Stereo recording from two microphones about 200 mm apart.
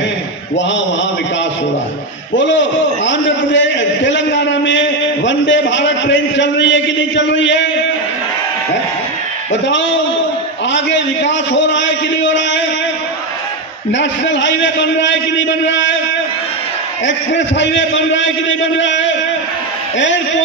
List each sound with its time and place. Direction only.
2.3 s a man's voice: 65° left (ahead or behind)
9.5 s a man's voice: 65° left (ahead or behind)
13.9 s a man's voice: 65° left (ahead or behind)
17.0 s a man's voice: 65° left (ahead or behind)